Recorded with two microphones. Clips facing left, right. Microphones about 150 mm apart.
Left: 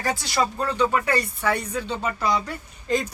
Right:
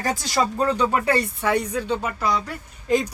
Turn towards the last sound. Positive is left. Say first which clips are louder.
# right 3 dB
turn(degrees=-10)  # may be behind; listen again after turning